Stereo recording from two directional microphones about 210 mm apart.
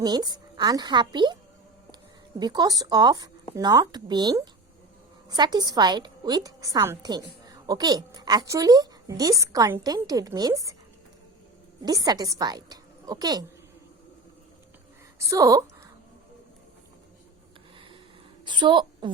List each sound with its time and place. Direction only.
0.0 s a woman's voice: 20° right (ahead or behind)
2.4 s a woman's voice: 20° right (ahead or behind)
11.8 s a woman's voice: 15° right (ahead or behind)
15.2 s a woman's voice: 15° right (ahead or behind)
18.4 s a woman's voice: 20° right (ahead or behind)